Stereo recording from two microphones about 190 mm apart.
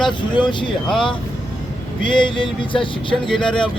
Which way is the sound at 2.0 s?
25° left (ahead or behind).